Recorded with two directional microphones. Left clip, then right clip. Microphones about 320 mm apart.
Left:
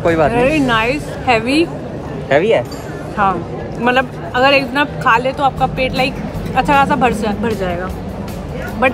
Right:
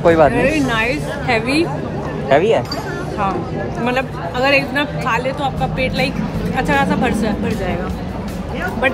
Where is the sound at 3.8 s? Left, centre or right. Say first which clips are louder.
Left 6 dB; centre.